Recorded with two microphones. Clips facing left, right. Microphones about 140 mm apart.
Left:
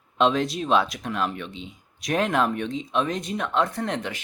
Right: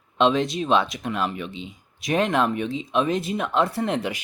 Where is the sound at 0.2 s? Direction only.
Centre (ahead or behind).